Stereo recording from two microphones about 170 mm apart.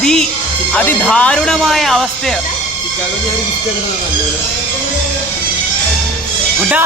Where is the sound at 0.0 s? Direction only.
5° left (ahead or behind).